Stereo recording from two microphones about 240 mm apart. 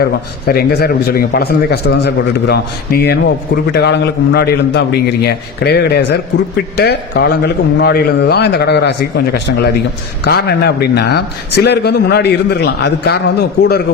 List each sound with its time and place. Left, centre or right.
0.0 s a man's voice: left